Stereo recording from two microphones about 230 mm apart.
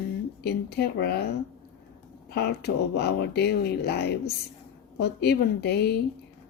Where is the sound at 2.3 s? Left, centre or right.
Left.